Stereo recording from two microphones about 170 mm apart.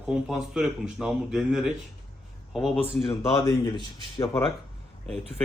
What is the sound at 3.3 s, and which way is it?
A man's voice, 20° left (ahead or behind).